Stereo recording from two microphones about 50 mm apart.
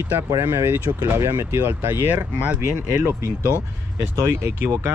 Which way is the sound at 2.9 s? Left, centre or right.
Right.